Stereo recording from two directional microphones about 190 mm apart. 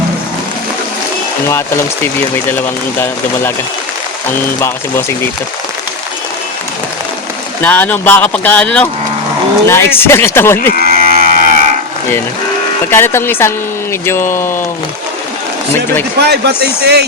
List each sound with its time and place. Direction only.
1.5 s speech: 15° left (ahead or behind)
4.6 s speech: 15° left (ahead or behind)
7.6 s speech: 10° left (ahead or behind)
10.8 s moo: 50° right (ahead or behind)
12.9 s speech: 10° left (ahead or behind)
16.2 s speech: 60° right (ahead or behind)